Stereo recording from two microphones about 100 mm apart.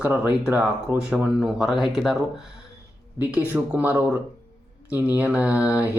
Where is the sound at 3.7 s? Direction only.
15° right (ahead or behind).